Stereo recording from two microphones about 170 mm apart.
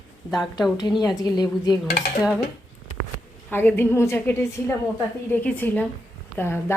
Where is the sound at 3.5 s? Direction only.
10° left (ahead or behind).